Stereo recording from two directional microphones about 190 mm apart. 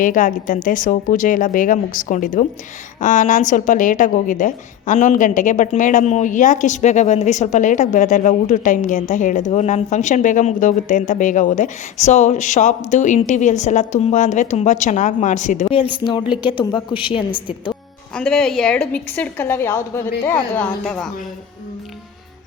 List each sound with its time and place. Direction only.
0.0 s a woman's voice: 45° left (ahead or behind)
16.2 s speech: 10° right (ahead or behind)
16.6 s a man's voice: 25° left (ahead or behind)
18.1 s a woman's voice: 5° left (ahead or behind)